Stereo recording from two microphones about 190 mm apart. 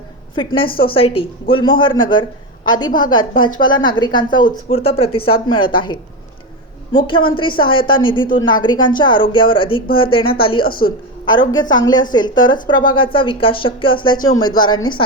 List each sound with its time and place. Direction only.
0.3 s a woman's voice: 30° left (ahead or behind)
14.2 s speech: 90° left
14.4 s a woman's voice: 20° left (ahead or behind)